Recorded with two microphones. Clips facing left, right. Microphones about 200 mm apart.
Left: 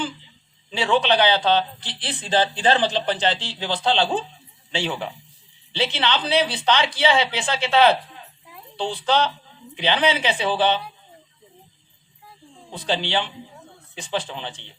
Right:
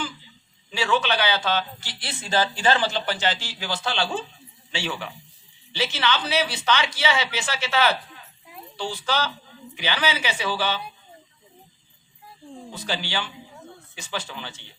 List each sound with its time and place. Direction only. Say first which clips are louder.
0.7 s speech: left 4 dB; 30° left (ahead or behind)
12.7 s speech: left 6 dB; 30° left (ahead or behind)